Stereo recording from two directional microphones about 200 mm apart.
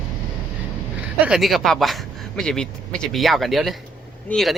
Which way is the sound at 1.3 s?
Centre (ahead or behind).